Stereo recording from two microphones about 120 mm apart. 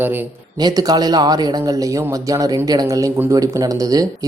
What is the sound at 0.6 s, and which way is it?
Speech, 35° right (ahead or behind).